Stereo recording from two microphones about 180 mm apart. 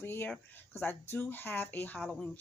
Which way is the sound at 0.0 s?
10° left (ahead or behind).